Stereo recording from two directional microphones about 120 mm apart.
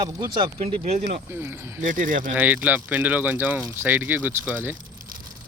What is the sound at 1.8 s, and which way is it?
Speech, 90° right.